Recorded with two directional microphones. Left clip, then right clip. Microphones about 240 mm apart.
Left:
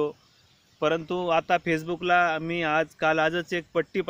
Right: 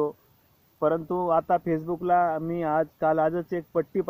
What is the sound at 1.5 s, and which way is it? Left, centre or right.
Speech, centre.